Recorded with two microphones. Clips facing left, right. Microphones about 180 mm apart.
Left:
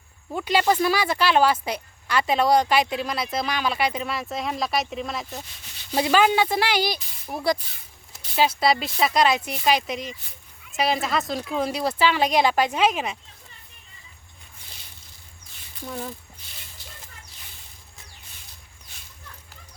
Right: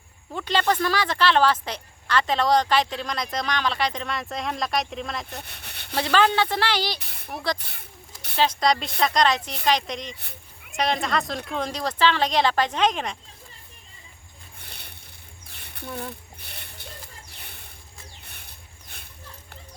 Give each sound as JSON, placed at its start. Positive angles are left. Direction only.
{"t": 0.3, "sound": "speech", "side_deg": 10}
{"t": 5.4, "sound": "speech", "side_deg": -65}
{"t": 5.9, "sound": "speech", "side_deg": 10}
{"t": 7.0, "sound": "speech", "side_deg": -65}
{"t": 7.6, "sound": "a sound", "side_deg": -65}
{"t": 8.4, "sound": "speech", "side_deg": 5}
{"t": 14.6, "sound": "a sound", "side_deg": -65}